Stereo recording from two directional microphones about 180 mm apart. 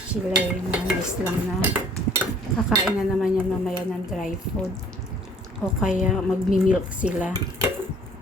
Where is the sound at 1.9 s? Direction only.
15° right (ahead or behind).